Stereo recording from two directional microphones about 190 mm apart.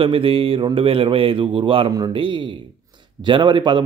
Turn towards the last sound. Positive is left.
turn(degrees=-25)  # may be behind; listen again after turning